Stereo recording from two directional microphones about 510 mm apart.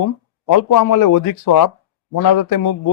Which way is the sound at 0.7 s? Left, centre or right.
Left.